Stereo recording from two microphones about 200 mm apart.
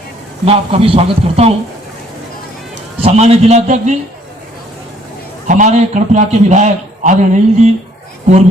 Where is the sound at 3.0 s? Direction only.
30° right (ahead or behind).